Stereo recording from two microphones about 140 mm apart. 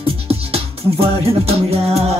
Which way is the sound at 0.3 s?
45° right (ahead or behind).